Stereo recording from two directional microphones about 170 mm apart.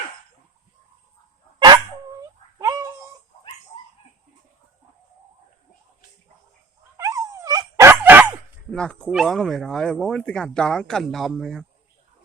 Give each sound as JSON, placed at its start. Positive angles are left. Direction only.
{"t": 1.5, "sound": "dog", "side_deg": -25}
{"t": 2.6, "sound": "cat", "side_deg": -20}
{"t": 6.9, "sound": "dog", "side_deg": -20}
{"t": 8.7, "sound": "speech", "side_deg": 5}